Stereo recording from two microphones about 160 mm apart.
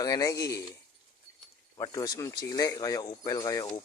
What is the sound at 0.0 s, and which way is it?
Speech, 20° left (ahead or behind).